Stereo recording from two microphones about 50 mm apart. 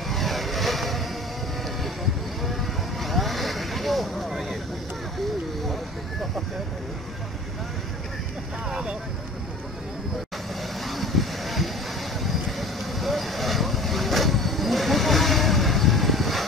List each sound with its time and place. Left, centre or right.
0.1 s vehicle: centre
2.4 s vehicle: centre
8.6 s vehicle: centre
10.8 s boat: centre
12.2 s vehicle: centre